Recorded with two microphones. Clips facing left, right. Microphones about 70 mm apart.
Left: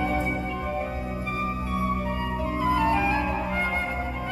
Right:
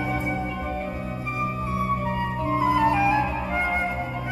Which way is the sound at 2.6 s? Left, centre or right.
Centre.